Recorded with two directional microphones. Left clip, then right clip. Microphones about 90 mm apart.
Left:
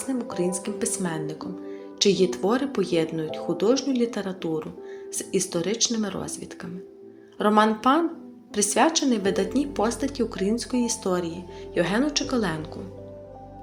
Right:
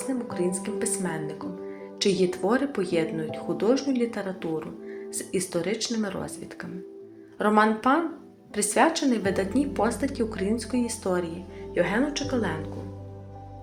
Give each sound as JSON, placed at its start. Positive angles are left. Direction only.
{"t": 0.1, "sound": "a woman's voice", "side_deg": 20}
{"t": 2.0, "sound": "speech", "side_deg": 10}
{"t": 11.7, "sound": "a woman's voice", "side_deg": 30}